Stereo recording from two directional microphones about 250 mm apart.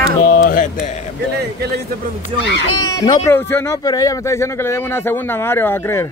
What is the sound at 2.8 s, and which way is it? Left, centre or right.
Speech, centre.